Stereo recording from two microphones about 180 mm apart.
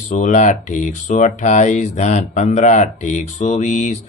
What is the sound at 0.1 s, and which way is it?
Speech, 40° left (ahead or behind).